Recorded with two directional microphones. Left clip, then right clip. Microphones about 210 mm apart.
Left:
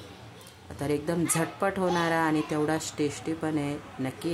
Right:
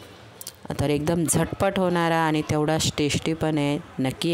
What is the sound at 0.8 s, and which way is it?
Speech, 45° right (ahead or behind).